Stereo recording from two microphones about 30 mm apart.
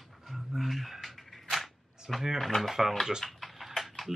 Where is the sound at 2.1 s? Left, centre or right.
Centre.